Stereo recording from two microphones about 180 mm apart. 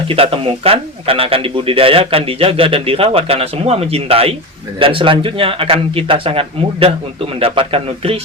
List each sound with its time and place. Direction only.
0.1 s speech: 30° right (ahead or behind)